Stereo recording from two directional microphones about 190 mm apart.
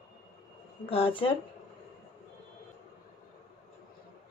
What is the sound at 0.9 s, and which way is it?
Speech, 30° left (ahead or behind).